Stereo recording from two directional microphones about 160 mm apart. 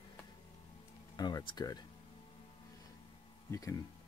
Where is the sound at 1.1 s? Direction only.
25° left (ahead or behind).